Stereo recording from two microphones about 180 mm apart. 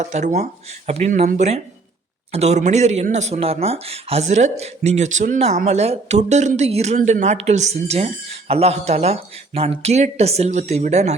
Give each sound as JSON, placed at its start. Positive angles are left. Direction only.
{"t": 0.0, "sound": "speech", "side_deg": -40}